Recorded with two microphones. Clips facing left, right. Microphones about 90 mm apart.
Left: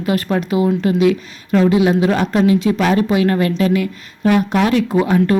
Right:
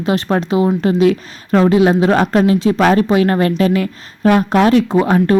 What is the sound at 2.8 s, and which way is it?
Speech, 50° right (ahead or behind).